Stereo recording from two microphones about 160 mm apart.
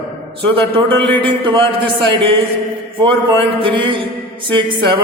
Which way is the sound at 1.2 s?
30° right (ahead or behind).